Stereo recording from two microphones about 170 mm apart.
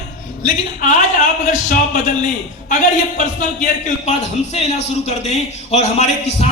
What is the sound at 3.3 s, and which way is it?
A man's voice, 45° left (ahead or behind).